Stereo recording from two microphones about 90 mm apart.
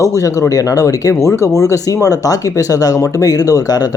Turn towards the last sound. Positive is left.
turn(degrees=40)  # may be behind; listen again after turning